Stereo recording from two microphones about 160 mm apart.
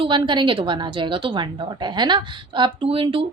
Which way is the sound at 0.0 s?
30° right (ahead or behind).